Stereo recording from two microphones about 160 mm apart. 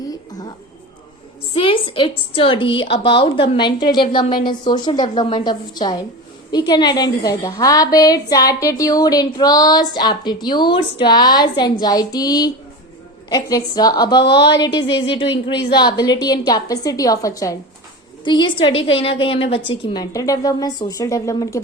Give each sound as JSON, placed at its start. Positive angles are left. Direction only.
{"t": 1.5, "sound": "a woman's voice", "side_deg": 35}
{"t": 15.7, "sound": "a woman's voice", "side_deg": 25}